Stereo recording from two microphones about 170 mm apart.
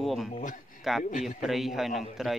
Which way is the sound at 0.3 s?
50° left (ahead or behind).